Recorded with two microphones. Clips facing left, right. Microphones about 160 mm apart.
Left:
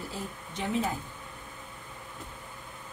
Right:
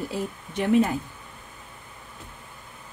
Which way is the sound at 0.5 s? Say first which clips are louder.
Right 10 dB; 65° right (ahead or behind).